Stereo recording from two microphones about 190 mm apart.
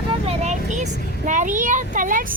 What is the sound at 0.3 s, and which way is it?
A child's voice, 35° right (ahead or behind).